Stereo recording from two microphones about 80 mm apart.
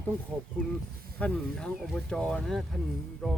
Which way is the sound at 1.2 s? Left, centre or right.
Centre.